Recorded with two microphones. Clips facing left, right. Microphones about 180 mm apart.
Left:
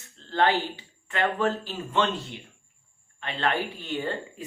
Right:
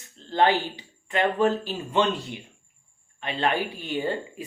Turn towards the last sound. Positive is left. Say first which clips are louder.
# right 3 dB
turn(degrees=-10)  # may be behind; listen again after turning